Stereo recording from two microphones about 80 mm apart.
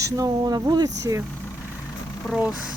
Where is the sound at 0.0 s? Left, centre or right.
Right.